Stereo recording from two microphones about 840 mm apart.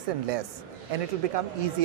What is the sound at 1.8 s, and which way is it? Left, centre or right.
Speech, right.